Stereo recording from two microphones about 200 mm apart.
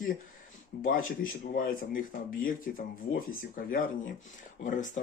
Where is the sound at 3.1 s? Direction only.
45° left (ahead or behind).